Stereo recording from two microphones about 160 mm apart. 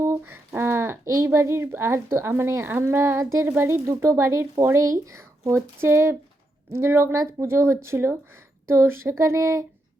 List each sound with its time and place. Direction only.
0.0 s speech: 15° right (ahead or behind)